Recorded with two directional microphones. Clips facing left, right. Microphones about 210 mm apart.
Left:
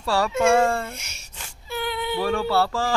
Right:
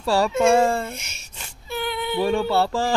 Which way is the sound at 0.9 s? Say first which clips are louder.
Right 3 dB; 10° left (ahead or behind).